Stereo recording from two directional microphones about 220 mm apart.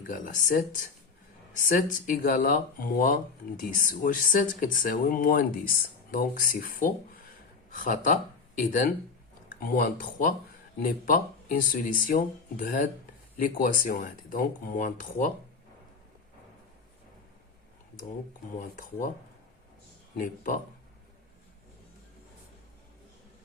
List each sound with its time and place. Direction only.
0.1 s speech: 40° left (ahead or behind)
18.6 s speech: 40° left (ahead or behind)
20.1 s speech: 40° left (ahead or behind)